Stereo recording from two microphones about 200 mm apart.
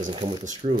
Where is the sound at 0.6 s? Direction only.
40° right (ahead or behind).